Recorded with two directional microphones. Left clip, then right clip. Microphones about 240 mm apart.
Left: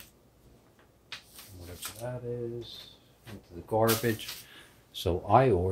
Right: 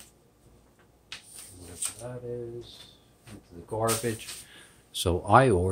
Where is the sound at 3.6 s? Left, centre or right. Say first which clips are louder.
Left 2 dB; left.